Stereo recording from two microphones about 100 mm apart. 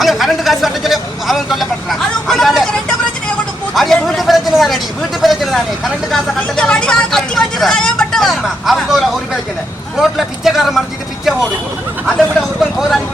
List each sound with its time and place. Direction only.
0.0 s vehicle: centre (ahead or behind)
3.8 s a sound: 5° left (ahead or behind)
5.2 s vehicle: centre (ahead or behind)
12.0 s vehicle: centre (ahead or behind)